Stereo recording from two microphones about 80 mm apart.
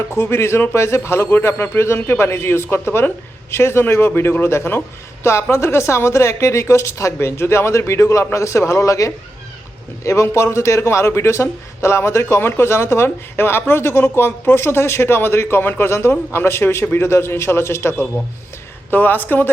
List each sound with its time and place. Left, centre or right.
0.1 s a man's voice: left
18.9 s speech: left